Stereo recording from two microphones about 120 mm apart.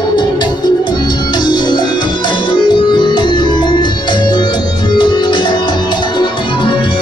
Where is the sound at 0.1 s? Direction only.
40° left (ahead or behind).